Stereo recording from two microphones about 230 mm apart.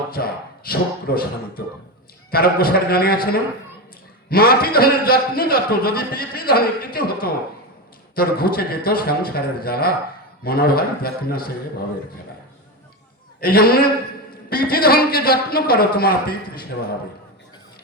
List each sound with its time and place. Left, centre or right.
0.1 s a man's voice: left
13.4 s a man's voice: left